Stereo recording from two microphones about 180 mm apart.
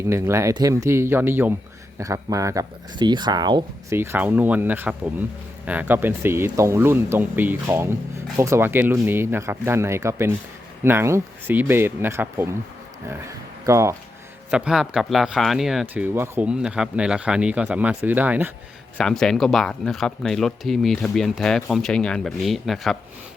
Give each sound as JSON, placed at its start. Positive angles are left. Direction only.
{"t": 0.1, "sound": "speech", "side_deg": -15}
{"t": 13.7, "sound": "speech", "side_deg": -15}
{"t": 14.5, "sound": "speech", "side_deg": -5}
{"t": 16.0, "sound": "speech", "side_deg": -15}
{"t": 18.9, "sound": "speech", "side_deg": 5}